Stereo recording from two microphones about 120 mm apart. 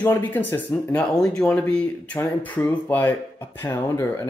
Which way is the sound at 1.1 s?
5° left (ahead or behind).